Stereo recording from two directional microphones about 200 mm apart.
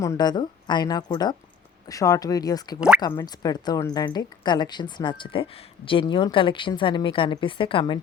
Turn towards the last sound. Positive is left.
turn(degrees=25)  # may be behind; listen again after turning